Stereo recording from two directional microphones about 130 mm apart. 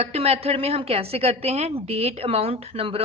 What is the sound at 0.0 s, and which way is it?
A woman's voice, 50° right (ahead or behind).